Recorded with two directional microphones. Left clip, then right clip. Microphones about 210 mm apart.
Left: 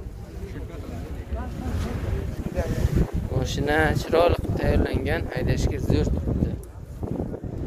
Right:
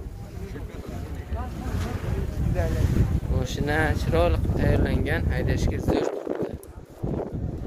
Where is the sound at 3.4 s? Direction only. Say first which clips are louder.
Left 3 dB; 20° left (ahead or behind).